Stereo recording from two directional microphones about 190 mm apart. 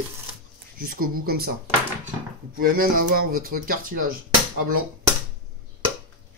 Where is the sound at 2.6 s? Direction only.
50° right (ahead or behind).